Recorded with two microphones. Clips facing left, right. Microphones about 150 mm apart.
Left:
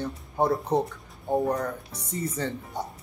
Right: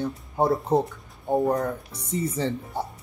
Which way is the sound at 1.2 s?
15° right (ahead or behind).